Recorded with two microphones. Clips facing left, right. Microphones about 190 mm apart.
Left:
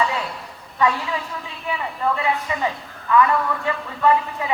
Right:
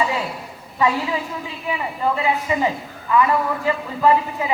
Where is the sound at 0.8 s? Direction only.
20° right (ahead or behind).